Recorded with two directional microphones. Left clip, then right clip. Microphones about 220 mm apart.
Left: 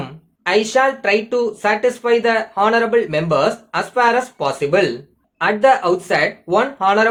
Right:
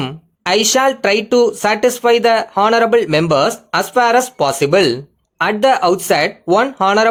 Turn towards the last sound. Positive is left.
turn(degrees=-50)  # may be behind; listen again after turning